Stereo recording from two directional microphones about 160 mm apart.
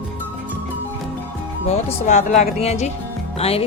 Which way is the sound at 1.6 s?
45° left (ahead or behind).